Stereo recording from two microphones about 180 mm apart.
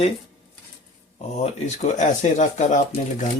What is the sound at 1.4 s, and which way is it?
Speech, 35° left (ahead or behind).